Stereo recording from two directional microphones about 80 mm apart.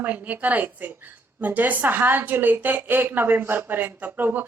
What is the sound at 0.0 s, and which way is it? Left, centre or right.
A woman's voice, centre.